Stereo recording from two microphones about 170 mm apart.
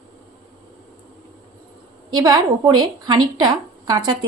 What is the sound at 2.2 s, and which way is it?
Speech, 25° right (ahead or behind).